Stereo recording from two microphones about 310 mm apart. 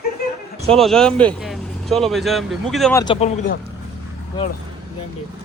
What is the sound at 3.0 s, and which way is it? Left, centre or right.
Speech, centre.